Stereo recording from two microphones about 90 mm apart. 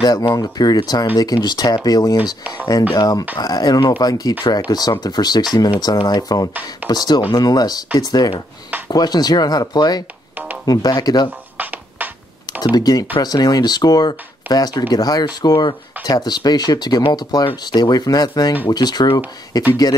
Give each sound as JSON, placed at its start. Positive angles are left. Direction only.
{"t": 0.0, "sound": "speech", "side_deg": 50}
{"t": 11.5, "sound": "music", "side_deg": -20}
{"t": 12.7, "sound": "speech", "side_deg": 45}